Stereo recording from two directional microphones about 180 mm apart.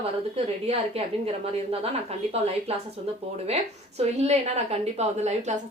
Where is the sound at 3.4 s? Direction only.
35° right (ahead or behind).